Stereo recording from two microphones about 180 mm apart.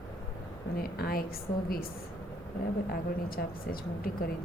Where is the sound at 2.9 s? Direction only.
55° left (ahead or behind).